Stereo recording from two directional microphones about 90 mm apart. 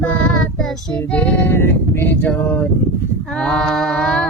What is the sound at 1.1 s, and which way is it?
Female singing, 20° left (ahead or behind).